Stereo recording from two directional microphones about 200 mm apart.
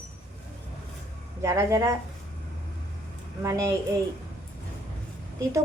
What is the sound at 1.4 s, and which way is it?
Speech, 15° right (ahead or behind).